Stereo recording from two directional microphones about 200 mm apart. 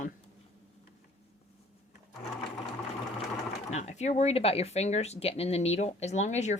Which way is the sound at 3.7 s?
35° left (ahead or behind).